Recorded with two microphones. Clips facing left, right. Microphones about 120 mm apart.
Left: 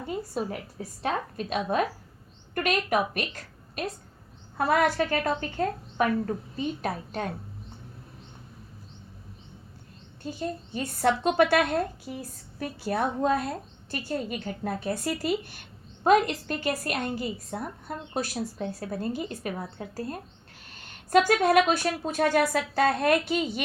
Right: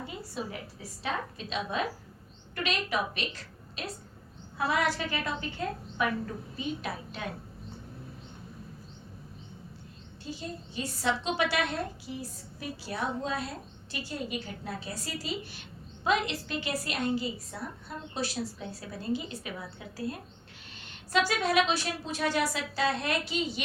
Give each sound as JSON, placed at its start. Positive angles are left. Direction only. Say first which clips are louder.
{"t": 0.4, "sound": "a woman's voice", "louder": "left 6 dB", "side_deg": 45}
{"t": 10.2, "sound": "a woman's voice", "louder": "left 6 dB", "side_deg": 50}